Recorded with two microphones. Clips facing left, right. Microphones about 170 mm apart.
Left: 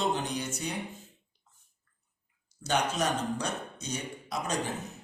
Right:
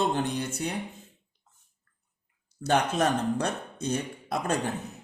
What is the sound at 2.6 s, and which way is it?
A man's voice, 55° right (ahead or behind).